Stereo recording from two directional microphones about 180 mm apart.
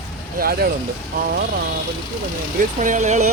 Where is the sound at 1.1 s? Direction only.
55° right (ahead or behind).